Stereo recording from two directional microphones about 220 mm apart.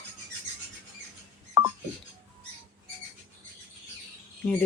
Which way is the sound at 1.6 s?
15° right (ahead or behind).